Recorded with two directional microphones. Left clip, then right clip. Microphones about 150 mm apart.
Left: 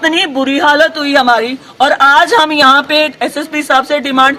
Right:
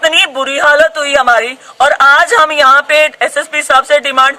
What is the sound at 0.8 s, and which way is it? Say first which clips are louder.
A man's voice: even; 15° right (ahead or behind).